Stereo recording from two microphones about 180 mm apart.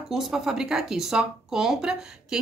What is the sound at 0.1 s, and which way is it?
A woman's voice, centre (ahead or behind).